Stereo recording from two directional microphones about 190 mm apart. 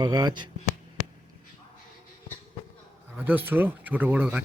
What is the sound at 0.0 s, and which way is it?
Speech, 20° right (ahead or behind).